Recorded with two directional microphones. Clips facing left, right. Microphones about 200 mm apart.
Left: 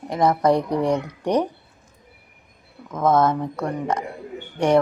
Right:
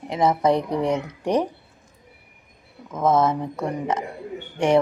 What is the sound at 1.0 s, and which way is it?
Speech, 25° right (ahead or behind).